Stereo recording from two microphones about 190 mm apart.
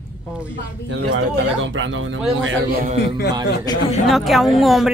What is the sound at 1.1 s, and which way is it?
A man's voice, 85° right.